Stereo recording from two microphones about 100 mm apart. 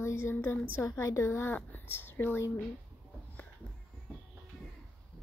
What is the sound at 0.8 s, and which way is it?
Speech, 30° left (ahead or behind).